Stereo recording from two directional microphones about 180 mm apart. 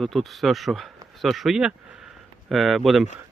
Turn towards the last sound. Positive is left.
turn(degrees=0)  # may be behind; listen again after turning